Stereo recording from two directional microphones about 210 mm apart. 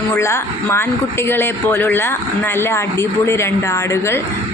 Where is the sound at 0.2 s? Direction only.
10° left (ahead or behind).